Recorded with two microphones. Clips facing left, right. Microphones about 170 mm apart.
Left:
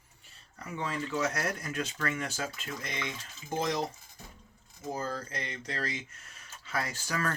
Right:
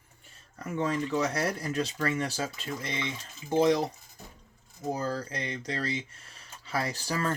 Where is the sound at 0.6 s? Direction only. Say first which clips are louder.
Right 6 dB; 45° right (ahead or behind).